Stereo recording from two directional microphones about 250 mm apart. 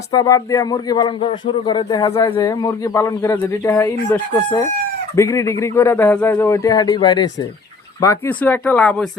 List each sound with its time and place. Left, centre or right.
0.1 s speech: centre